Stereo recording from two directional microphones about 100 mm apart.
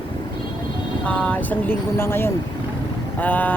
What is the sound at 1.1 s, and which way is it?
Speech, 10° left (ahead or behind).